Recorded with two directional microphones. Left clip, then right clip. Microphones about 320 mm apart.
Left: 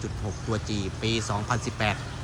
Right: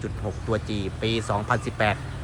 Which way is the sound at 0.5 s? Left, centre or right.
Centre.